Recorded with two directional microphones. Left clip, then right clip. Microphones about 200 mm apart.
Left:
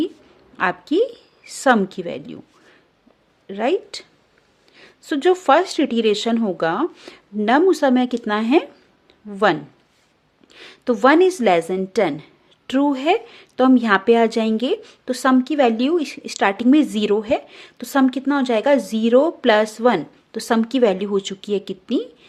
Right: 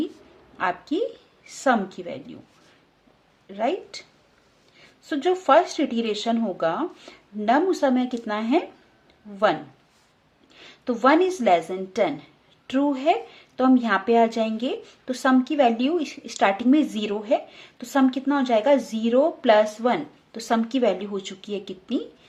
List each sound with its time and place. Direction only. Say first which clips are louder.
0.5 s a woman's voice: left 6 dB; 45° left (ahead or behind)
3.4 s a woman's voice: left 5 dB; 50° left (ahead or behind)